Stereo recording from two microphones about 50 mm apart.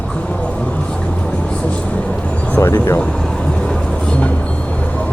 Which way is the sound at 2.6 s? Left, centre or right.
Left.